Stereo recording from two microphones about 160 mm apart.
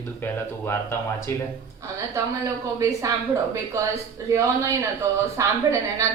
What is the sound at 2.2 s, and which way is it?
Speech, 20° right (ahead or behind).